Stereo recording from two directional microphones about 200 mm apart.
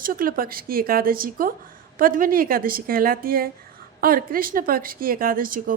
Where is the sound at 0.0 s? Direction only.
45° right (ahead or behind).